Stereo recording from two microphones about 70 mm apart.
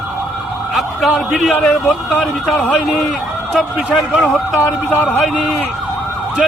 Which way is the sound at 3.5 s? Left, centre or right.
Centre.